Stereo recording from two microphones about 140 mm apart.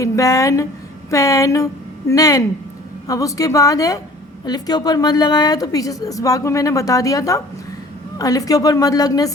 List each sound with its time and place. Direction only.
0.0 s a woman's voice: 25° left (ahead or behind)